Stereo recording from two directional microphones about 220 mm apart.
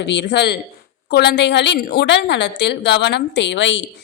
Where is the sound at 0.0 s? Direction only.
55° left (ahead or behind).